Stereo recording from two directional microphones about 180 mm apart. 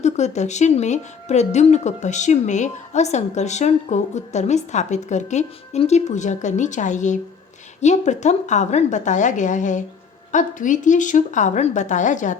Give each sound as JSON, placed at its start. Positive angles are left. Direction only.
{"t": 0.0, "sound": "a woman's voice", "side_deg": 40}